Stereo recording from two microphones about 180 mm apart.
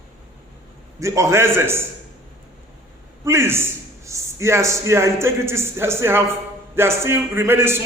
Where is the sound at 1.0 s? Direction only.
15° right (ahead or behind).